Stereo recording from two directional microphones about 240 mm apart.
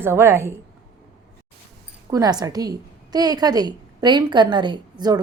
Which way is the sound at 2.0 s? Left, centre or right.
Centre.